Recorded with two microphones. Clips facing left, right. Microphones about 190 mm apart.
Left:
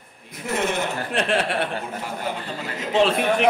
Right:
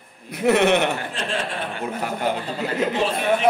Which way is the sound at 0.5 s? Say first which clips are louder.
Right 7 dB; 70° right (ahead or behind).